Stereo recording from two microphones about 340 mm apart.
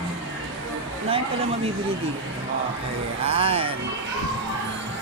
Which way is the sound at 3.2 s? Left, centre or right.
Centre.